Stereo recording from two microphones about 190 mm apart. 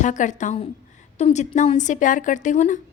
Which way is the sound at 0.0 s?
40° left (ahead or behind).